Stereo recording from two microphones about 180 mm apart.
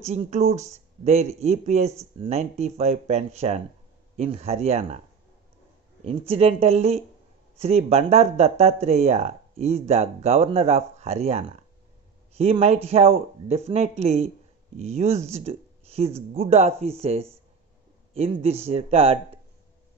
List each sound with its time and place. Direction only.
0.0 s speech: 35° right (ahead or behind)
6.0 s speech: 35° right (ahead or behind)